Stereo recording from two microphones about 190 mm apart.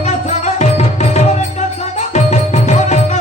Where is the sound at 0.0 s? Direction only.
35° left (ahead or behind).